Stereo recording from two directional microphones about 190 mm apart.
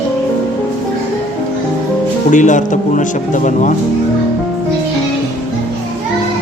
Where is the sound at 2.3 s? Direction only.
40° left (ahead or behind).